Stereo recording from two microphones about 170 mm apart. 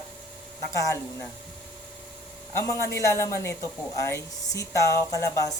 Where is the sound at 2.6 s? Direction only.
15° left (ahead or behind).